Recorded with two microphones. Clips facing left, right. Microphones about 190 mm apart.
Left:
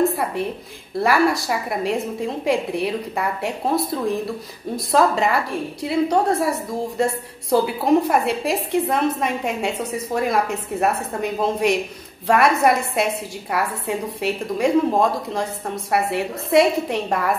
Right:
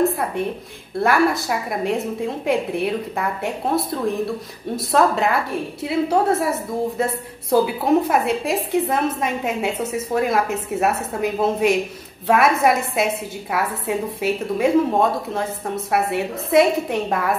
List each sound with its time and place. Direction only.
0.0 s a woman's voice: centre (ahead or behind)